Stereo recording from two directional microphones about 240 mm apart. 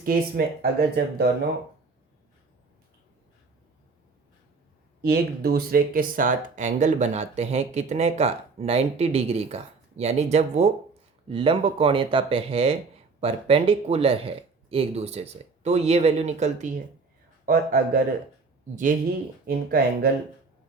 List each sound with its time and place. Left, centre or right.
0.0 s speech: right
5.0 s speech: right
19.5 s speech: right